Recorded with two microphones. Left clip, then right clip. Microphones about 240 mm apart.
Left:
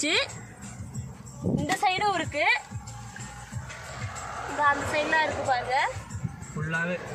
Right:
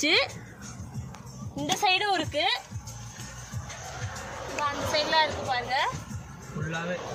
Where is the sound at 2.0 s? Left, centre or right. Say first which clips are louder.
Left 1 dB; centre.